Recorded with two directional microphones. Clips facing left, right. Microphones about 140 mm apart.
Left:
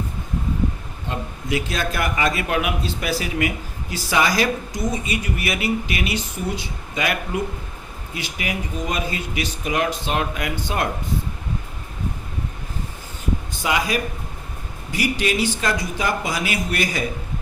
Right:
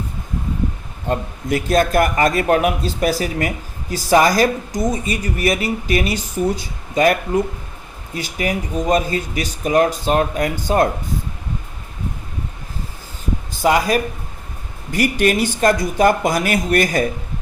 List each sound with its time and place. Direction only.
1.0 s a man's voice: 45° right (ahead or behind)
13.6 s a man's voice: 40° right (ahead or behind)